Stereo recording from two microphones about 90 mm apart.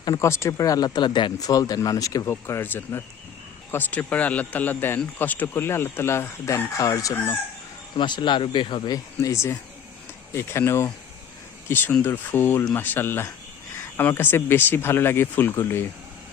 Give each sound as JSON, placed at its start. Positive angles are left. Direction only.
{"t": 0.2, "sound": "speech", "side_deg": 30}
{"t": 1.5, "sound": "speech", "side_deg": 45}
{"t": 2.3, "sound": "speech", "side_deg": 25}
{"t": 7.9, "sound": "speech", "side_deg": 60}
{"t": 8.9, "sound": "speech", "side_deg": 35}